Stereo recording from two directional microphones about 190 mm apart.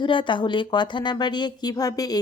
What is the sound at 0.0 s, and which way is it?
A woman's voice, 25° left (ahead or behind).